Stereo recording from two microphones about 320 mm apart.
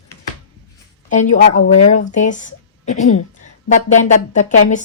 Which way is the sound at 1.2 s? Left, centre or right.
Left.